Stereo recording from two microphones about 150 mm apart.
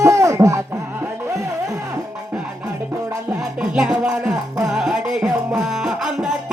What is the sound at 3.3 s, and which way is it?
Music, 5° right (ahead or behind).